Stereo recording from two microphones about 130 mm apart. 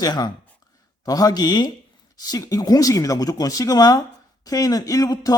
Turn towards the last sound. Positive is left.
turn(degrees=30)  # may be behind; listen again after turning